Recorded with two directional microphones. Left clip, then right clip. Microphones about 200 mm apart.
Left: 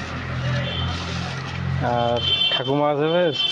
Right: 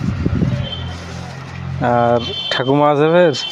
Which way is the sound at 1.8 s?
65° right (ahead or behind).